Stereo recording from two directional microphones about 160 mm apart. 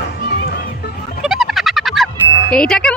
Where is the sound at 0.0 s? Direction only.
90° left.